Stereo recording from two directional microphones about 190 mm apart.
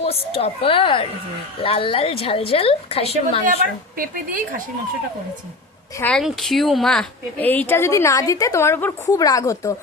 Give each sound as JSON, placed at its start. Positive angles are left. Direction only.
{"t": 0.4, "sound": "a woman's voice", "side_deg": 30}
{"t": 3.9, "sound": "speech", "side_deg": -45}
{"t": 6.0, "sound": "speech", "side_deg": 5}